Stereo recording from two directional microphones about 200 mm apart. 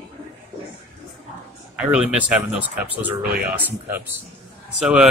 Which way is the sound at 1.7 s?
5° right (ahead or behind).